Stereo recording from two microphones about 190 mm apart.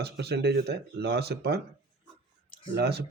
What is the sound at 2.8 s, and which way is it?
Speech, 60° right (ahead or behind).